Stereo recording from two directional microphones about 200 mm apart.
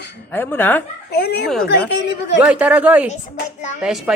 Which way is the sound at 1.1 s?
55° left (ahead or behind).